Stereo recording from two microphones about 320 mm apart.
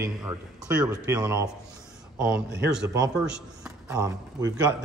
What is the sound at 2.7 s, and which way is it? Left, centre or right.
A man's voice, centre.